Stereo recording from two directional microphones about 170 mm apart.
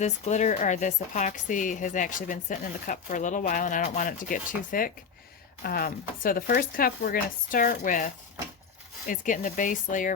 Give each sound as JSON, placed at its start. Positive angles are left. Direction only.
{"t": 0.0, "sound": "a woman's voice", "side_deg": 45}